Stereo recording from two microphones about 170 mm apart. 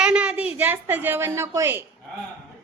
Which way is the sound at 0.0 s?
5° right (ahead or behind).